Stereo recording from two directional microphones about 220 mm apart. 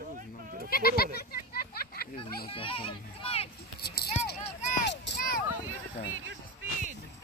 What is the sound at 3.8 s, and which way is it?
Speech, 45° left (ahead or behind).